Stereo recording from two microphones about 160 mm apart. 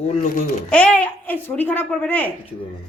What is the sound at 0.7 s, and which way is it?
Speech, 5° left (ahead or behind).